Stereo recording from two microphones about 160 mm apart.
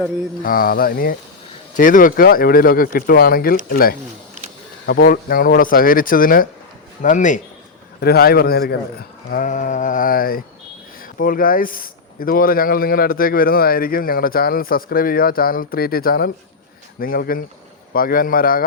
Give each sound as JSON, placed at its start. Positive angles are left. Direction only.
{"t": 0.4, "sound": "speech", "side_deg": 65}
{"t": 7.0, "sound": "speech", "side_deg": 50}
{"t": 8.0, "sound": "speech", "side_deg": 75}